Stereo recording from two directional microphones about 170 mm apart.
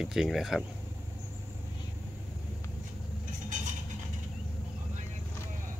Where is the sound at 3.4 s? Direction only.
50° right (ahead or behind).